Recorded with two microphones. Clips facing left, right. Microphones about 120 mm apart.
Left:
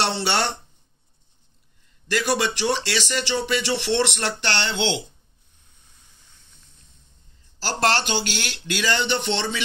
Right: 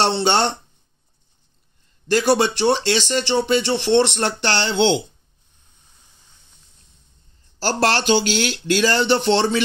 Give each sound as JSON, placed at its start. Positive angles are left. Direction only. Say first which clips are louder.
{"t": 0.0, "sound": "speech", "louder": "right 5 dB", "side_deg": -25}
{"t": 2.0, "sound": "speech", "louder": "right 6 dB", "side_deg": -35}
{"t": 7.6, "sound": "speech", "louder": "right 4 dB", "side_deg": -45}